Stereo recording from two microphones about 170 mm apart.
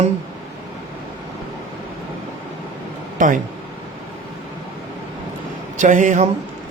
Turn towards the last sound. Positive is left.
turn(degrees=-45)  # may be behind; listen again after turning